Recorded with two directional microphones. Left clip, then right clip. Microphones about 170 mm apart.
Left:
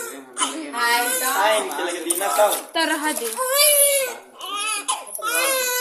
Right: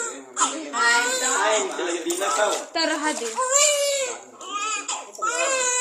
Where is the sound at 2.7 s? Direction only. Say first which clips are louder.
Left 2 dB; 20° left (ahead or behind).